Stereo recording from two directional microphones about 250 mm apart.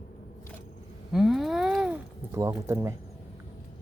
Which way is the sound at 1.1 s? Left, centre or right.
Centre.